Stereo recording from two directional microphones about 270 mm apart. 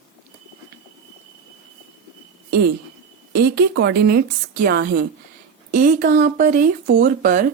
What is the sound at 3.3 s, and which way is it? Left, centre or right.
Speech, right.